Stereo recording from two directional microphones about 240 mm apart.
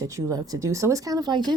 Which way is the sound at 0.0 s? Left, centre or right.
Centre.